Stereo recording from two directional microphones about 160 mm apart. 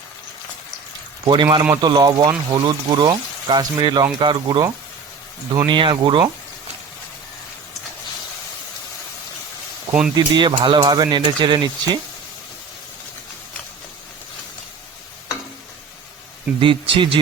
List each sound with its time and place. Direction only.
1.2 s speech: 30° right (ahead or behind)
10.2 s speech: 30° right (ahead or behind)
16.6 s speech: 30° right (ahead or behind)